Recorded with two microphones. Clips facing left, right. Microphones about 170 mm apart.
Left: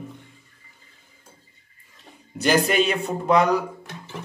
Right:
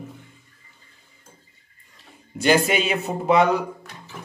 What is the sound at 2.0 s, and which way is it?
Speech, centre (ahead or behind).